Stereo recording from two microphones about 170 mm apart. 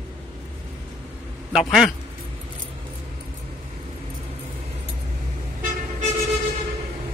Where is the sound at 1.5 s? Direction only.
Centre (ahead or behind).